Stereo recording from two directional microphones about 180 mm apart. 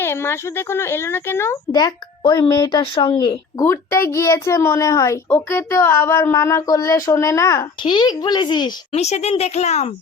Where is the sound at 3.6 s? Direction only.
15° left (ahead or behind).